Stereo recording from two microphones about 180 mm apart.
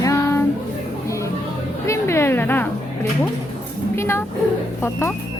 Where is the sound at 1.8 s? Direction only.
15° left (ahead or behind).